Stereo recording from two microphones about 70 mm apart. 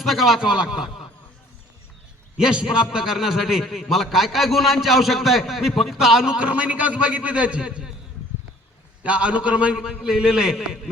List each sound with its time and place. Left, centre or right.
0.0 s a man's voice: centre
2.4 s a man's voice: centre
6.5 s a man's voice: right
9.0 s a man's voice: centre